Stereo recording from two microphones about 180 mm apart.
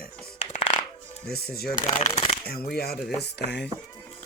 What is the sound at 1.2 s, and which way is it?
Speech, 60° left (ahead or behind).